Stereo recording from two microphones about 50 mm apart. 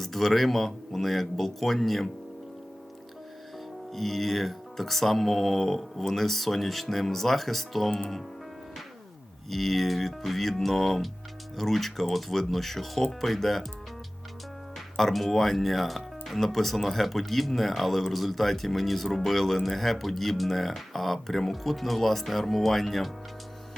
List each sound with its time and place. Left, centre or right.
0.0 s speech: centre
3.9 s speech: centre
9.5 s speech: centre
14.9 s speech: centre